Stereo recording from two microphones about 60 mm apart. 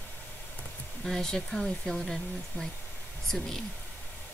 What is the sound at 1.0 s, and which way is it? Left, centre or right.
Speech, centre.